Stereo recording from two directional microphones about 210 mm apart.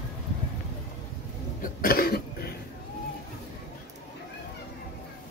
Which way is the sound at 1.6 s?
45° left (ahead or behind).